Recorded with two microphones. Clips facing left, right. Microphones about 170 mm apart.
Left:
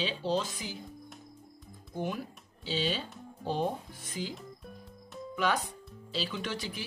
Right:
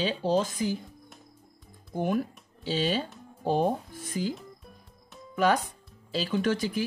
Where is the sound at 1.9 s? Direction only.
50° right (ahead or behind).